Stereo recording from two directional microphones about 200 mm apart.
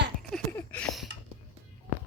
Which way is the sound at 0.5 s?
5° left (ahead or behind).